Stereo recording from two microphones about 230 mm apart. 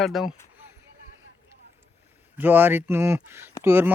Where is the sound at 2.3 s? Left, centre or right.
Centre.